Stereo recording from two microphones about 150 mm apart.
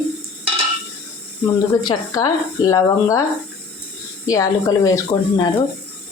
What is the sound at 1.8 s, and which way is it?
Speech, 25° left (ahead or behind).